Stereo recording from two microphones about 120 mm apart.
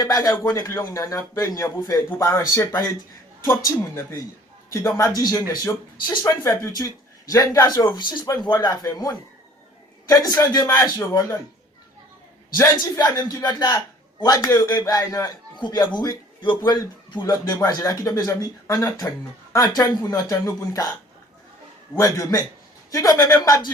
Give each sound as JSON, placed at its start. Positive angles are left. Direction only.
{"t": 0.0, "sound": "a man's voice", "side_deg": 30}
{"t": 12.5, "sound": "a man's voice", "side_deg": 30}
{"t": 21.9, "sound": "speech", "side_deg": 25}